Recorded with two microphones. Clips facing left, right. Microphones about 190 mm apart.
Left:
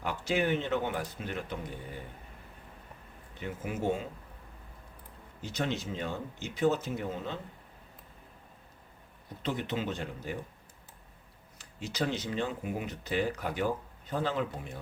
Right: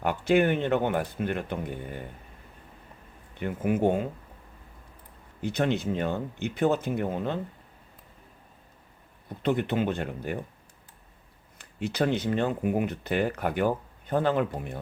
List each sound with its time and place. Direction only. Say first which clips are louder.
0.0 s speech: right 7 dB; 60° right (ahead or behind)
3.4 s speech: right 8 dB; 55° right (ahead or behind)
5.4 s speech: right 7 dB; 60° right (ahead or behind)
9.4 s speech: right 7 dB; 55° right (ahead or behind)
11.5 s speech: right 7 dB; 60° right (ahead or behind)